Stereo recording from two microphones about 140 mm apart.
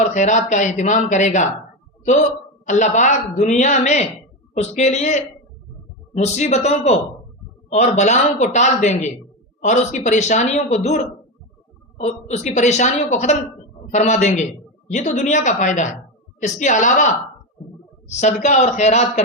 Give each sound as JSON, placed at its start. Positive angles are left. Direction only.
{"t": 0.0, "sound": "a man's voice", "side_deg": 60}
{"t": 18.2, "sound": "a man's voice", "side_deg": 55}